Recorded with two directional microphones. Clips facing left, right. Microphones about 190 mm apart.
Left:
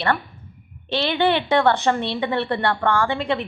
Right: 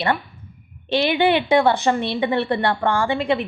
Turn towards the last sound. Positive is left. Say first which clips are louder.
# right 2 dB
turn(degrees=-10)  # may be behind; listen again after turning